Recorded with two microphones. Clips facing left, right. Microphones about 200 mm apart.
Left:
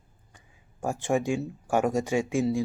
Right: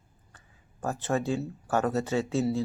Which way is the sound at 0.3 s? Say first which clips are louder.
Left 2 dB; 15° left (ahead or behind).